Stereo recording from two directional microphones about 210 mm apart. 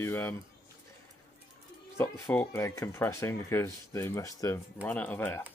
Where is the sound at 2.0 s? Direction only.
10° left (ahead or behind).